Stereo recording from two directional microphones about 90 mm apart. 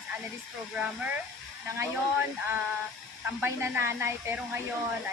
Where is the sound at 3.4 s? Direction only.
25° right (ahead or behind).